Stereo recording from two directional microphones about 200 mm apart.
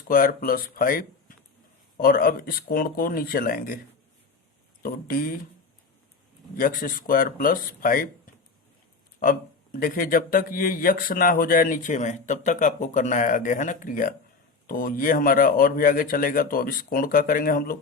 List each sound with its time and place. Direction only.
0.1 s a man's voice: 45° left (ahead or behind)
4.8 s a man's voice: 45° left (ahead or behind)
6.6 s a man's voice: 40° left (ahead or behind)
9.7 s a man's voice: 45° left (ahead or behind)